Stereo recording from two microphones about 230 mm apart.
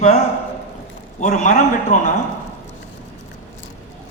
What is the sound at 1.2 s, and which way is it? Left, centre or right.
Speech, left.